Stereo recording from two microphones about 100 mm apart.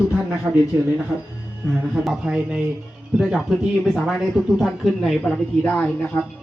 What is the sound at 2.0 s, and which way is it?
Speech, 10° right (ahead or behind).